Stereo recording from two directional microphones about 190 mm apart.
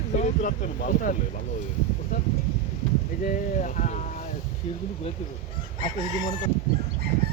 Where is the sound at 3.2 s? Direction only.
40° left (ahead or behind).